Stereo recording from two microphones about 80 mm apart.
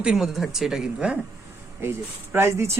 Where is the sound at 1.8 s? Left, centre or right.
Right.